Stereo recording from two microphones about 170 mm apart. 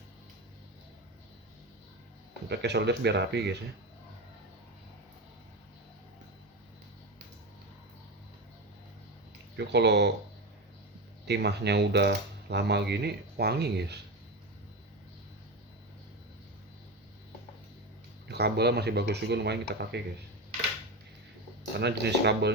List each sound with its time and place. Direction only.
2.5 s speech: 80° right
9.6 s speech: 85° right
11.3 s speech: 80° right
18.3 s speech: 75° right (ahead or behind)
21.8 s speech: 80° right